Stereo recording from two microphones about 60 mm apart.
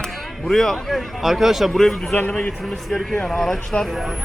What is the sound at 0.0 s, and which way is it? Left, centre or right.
Speech, centre.